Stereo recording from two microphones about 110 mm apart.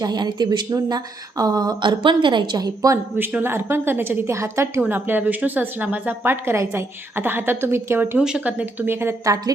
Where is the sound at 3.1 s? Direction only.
20° right (ahead or behind).